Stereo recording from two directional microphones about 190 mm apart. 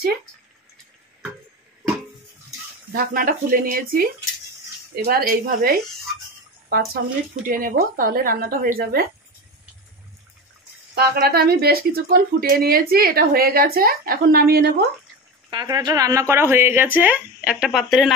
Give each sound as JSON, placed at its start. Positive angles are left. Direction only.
{"t": 2.9, "sound": "speech", "side_deg": -50}
{"t": 5.0, "sound": "speech", "side_deg": -55}
{"t": 11.0, "sound": "speech", "side_deg": -55}
{"t": 15.5, "sound": "speech", "side_deg": -20}